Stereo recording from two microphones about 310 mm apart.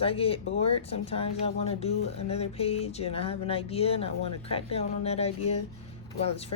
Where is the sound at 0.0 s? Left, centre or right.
Centre.